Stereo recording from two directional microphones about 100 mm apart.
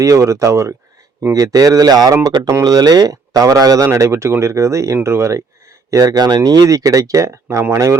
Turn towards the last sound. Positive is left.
turn(degrees=-30)  # may be behind; listen again after turning